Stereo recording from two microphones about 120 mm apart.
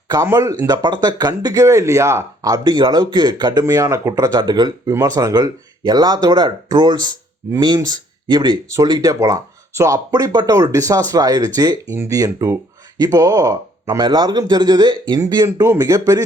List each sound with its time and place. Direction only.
0.1 s speech: 30° right (ahead or behind)